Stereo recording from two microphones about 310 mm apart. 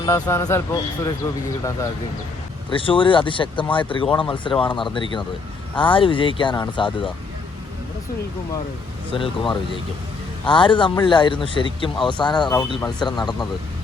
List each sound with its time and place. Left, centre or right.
0.0 s speech: centre
2.6 s speech: centre
9.1 s speech: centre